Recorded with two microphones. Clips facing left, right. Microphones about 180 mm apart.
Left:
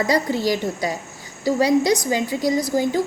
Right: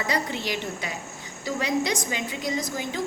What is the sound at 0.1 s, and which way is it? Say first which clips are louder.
A woman's voice: left 8 dB; 35° left (ahead or behind).